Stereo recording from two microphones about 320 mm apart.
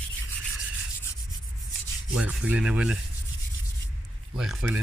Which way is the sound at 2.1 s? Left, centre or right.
Centre.